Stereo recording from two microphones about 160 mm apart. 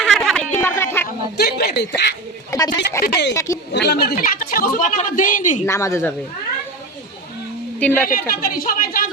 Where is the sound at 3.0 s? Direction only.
85° left; by 5.6 s 55° left (ahead or behind).